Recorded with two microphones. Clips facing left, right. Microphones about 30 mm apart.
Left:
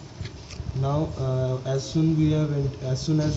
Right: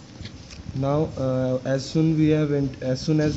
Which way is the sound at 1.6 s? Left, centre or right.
Right.